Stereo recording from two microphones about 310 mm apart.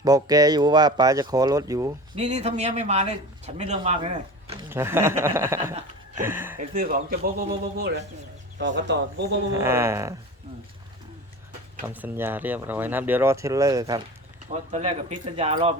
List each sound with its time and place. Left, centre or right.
0.0 s speech: centre
2.1 s speech: right
4.7 s speech: centre
6.6 s speech: right
9.5 s speech: centre
11.9 s speech: centre